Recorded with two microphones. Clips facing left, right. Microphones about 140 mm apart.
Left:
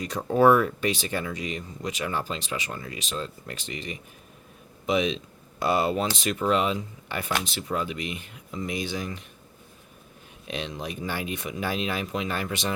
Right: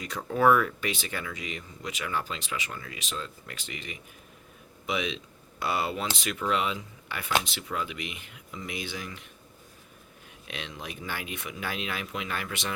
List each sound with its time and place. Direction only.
0.0 s speech: 35° left (ahead or behind)
10.5 s speech: 30° left (ahead or behind)